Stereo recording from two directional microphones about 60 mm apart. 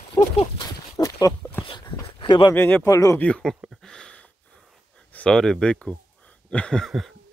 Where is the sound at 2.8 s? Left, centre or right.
Left.